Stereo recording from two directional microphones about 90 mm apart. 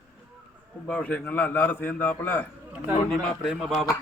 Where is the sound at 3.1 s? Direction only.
Centre (ahead or behind).